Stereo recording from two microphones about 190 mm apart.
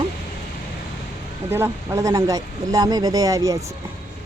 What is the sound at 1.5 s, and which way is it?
Speech, 10° right (ahead or behind).